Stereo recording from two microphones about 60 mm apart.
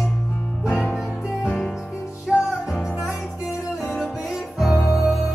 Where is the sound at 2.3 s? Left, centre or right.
Centre.